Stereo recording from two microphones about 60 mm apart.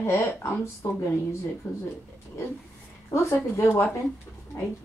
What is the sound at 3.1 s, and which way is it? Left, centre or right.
Speech, left.